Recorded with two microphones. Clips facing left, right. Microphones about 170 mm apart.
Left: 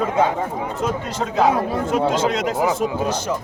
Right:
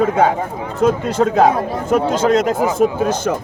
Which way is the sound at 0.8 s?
55° right (ahead or behind).